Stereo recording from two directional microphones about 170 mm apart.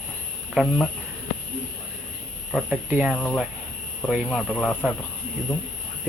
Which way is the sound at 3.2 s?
5° left (ahead or behind).